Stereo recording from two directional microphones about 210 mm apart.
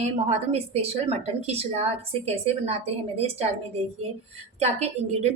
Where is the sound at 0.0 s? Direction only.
30° right (ahead or behind).